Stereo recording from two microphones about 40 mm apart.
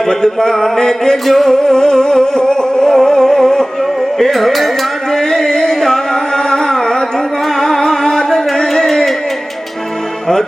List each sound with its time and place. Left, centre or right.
0.1 s music: centre
4.2 s carnatic music: centre
7.6 s music: centre